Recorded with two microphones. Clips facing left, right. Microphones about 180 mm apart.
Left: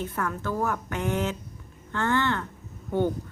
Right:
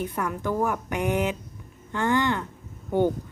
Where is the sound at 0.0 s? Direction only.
15° right (ahead or behind).